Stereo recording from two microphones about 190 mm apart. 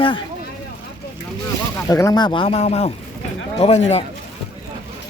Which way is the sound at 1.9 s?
20° left (ahead or behind).